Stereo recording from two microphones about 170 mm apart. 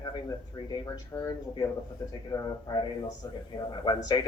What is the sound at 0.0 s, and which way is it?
A woman's voice, 25° left (ahead or behind).